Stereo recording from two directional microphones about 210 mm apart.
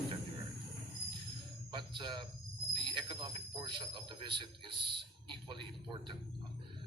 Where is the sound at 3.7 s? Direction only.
25° right (ahead or behind).